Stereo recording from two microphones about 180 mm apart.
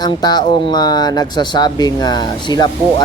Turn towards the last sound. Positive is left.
turn(degrees=25)  # may be behind; listen again after turning